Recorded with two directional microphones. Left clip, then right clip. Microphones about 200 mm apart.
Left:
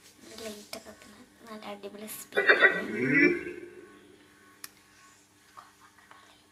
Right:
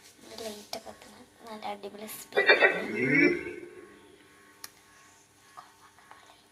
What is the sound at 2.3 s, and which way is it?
A man's voice, 10° left (ahead or behind).